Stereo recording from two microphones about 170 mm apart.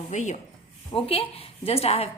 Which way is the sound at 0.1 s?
45° left (ahead or behind).